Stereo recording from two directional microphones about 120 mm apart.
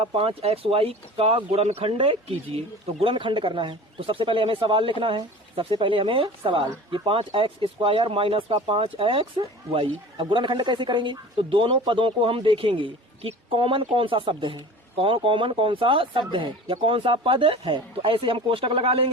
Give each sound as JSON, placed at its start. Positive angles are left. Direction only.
{"t": 0.0, "sound": "speech", "side_deg": -50}